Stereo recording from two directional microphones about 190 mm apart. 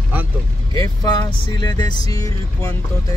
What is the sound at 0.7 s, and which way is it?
Speech, 20° left (ahead or behind).